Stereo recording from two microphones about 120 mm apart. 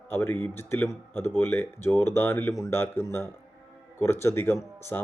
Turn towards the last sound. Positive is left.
turn(degrees=20)  # may be behind; listen again after turning